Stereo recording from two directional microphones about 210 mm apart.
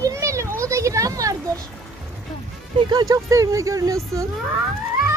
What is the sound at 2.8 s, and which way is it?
Speech, 20° right (ahead or behind).